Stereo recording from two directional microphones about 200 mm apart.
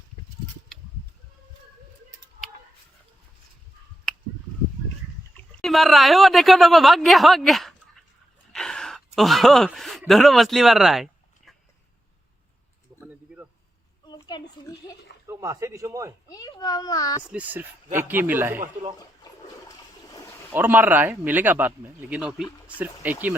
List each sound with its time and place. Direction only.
5.6 s speech: centre (ahead or behind)
8.5 s a sound: 5° left (ahead or behind)
13.0 s a sound: 10° right (ahead or behind)
14.0 s a sound: 20° left (ahead or behind)
15.3 s speech: 15° right (ahead or behind)
16.3 s a child's voice: 20° left (ahead or behind)
17.2 s speech: 5° right (ahead or behind)
18.9 s toilet flush: 20° left (ahead or behind)
20.5 s speech: 10° right (ahead or behind)